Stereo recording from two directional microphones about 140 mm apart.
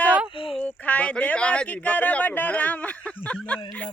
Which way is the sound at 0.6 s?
10° left (ahead or behind).